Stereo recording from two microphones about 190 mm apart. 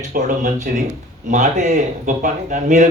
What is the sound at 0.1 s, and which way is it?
A man's voice, 40° right (ahead or behind).